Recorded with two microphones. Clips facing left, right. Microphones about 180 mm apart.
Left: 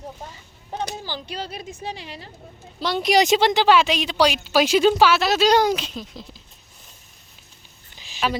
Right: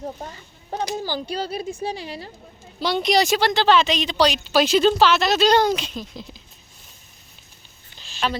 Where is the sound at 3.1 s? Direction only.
20° left (ahead or behind); by 6.2 s centre (ahead or behind).